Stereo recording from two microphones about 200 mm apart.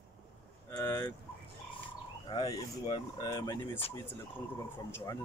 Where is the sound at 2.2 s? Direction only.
20° left (ahead or behind).